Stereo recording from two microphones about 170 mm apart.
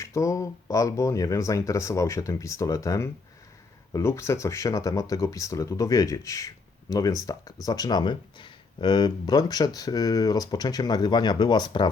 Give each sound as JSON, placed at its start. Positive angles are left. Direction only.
{"t": 0.0, "sound": "speech", "side_deg": 20}